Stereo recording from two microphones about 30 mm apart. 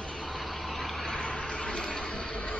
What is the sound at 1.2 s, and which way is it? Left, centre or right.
Vehicle, left.